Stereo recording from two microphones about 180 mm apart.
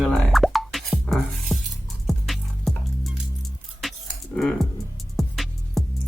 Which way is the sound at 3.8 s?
Centre (ahead or behind).